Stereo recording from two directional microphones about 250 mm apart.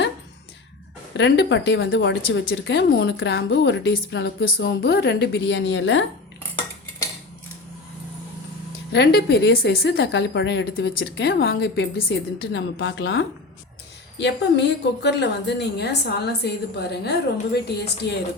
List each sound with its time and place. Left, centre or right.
1.1 s speech: left
8.9 s speech: left